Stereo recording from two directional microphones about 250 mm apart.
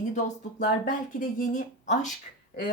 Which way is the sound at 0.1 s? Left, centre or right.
Left.